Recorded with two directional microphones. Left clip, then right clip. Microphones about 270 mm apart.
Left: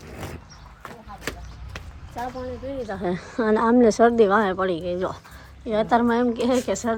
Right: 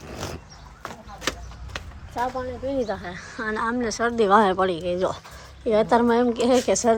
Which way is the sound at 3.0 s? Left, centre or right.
Centre.